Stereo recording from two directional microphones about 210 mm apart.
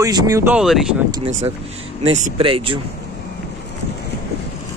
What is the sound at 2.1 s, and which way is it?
Speech, 30° right (ahead or behind).